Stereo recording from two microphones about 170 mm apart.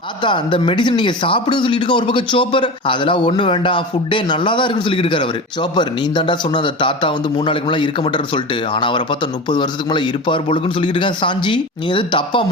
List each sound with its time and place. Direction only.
0.2 s a man's voice: 30° left (ahead or behind)